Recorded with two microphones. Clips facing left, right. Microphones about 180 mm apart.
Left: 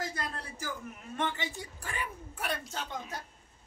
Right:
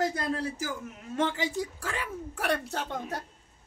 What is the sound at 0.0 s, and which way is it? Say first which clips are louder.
A man's voice: right 9 dB; 85° right.